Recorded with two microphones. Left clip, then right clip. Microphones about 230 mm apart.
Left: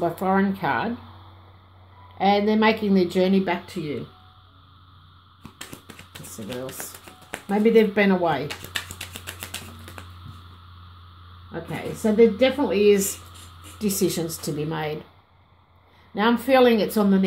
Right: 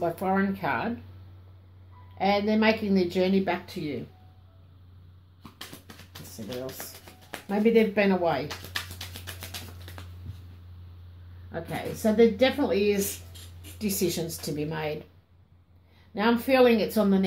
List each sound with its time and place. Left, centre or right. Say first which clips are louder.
0.0 s speech: left 4 dB; left
2.1 s speech: left 5 dB; left
6.3 s a sound: left 3 dB; left
12.2 s speech: left 4 dB; left
16.2 s speech: left 4 dB; left